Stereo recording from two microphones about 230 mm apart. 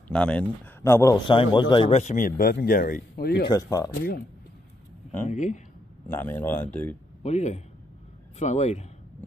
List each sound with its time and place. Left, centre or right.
0.1 s speech: centre; by 3.4 s left
3.4 s speech: centre
5.2 s speech: left
6.0 s speech: centre
7.2 s speech: left